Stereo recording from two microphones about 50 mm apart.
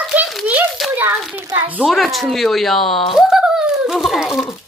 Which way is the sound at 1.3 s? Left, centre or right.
Right.